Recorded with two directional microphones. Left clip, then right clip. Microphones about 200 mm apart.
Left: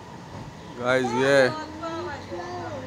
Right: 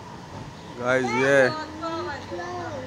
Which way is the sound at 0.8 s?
15° left (ahead or behind).